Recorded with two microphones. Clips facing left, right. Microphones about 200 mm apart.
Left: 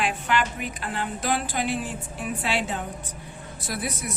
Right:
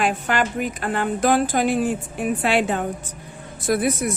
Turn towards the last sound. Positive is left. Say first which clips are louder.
# right 11 dB
turn(degrees=-50)  # may be behind; listen again after turning